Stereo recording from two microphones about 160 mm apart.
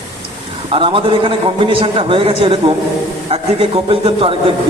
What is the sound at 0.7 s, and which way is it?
A man's voice, 35° right (ahead or behind).